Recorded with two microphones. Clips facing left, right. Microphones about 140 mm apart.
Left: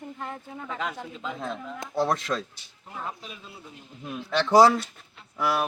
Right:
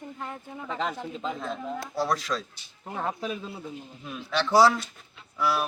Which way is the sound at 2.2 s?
55° left (ahead or behind).